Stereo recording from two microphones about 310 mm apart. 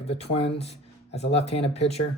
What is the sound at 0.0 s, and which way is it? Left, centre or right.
Speech, centre.